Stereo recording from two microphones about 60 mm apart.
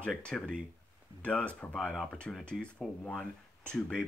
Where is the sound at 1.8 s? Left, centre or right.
Centre.